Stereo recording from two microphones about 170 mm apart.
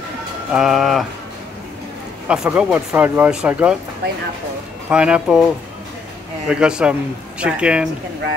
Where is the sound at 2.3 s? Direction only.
10° right (ahead or behind).